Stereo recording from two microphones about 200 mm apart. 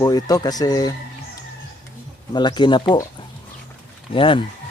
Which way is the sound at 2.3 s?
20° left (ahead or behind).